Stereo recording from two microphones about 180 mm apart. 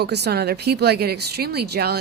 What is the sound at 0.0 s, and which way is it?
Speech, 65° right (ahead or behind).